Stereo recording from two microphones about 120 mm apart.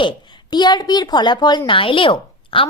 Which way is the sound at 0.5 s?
35° left (ahead or behind).